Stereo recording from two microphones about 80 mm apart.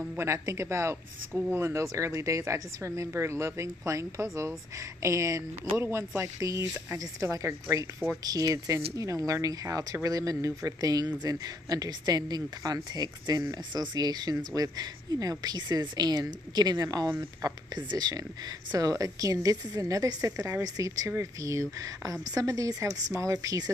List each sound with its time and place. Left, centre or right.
0.2 s a woman's voice: right
17.7 s a woman's voice: right